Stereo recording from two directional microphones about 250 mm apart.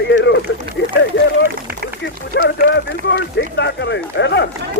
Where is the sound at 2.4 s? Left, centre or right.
Left.